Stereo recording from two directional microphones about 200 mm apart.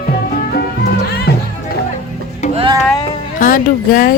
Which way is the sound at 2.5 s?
25° right (ahead or behind).